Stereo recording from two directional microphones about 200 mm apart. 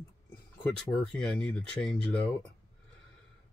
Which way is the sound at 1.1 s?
5° left (ahead or behind).